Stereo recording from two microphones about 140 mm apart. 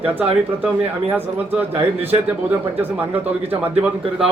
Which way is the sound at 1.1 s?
15° right (ahead or behind).